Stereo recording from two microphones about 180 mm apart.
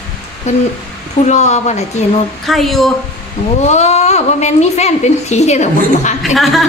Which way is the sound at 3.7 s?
40° left (ahead or behind).